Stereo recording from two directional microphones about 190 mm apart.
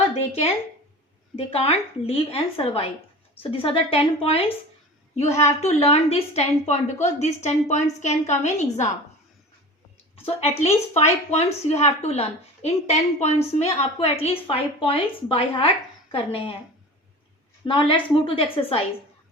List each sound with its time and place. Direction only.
0.1 s speech: 35° left (ahead or behind)
1.5 s a woman's voice: 30° left (ahead or behind)
10.2 s a woman's voice: 30° left (ahead or behind)
17.7 s a woman's voice: 25° left (ahead or behind)